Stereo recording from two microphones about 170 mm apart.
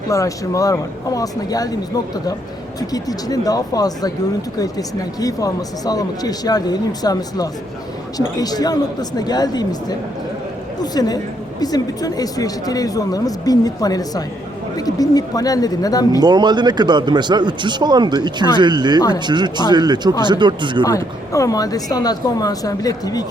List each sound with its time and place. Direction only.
0.1 s speech: 20° left (ahead or behind)
2.9 s speech: 20° left (ahead or behind)
10.9 s speech: 25° left (ahead or behind)
16.2 s speech: 25° right (ahead or behind)
20.8 s speech: 20° left (ahead or behind)